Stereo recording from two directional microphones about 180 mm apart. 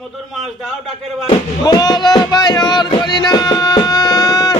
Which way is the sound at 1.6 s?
20° left (ahead or behind).